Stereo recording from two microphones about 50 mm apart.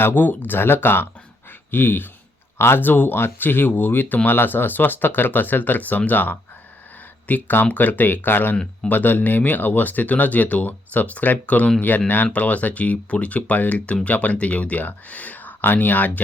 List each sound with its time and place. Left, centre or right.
0.0 s speech: left